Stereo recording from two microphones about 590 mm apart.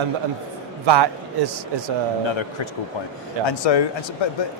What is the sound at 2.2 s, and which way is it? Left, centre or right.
Speech, left.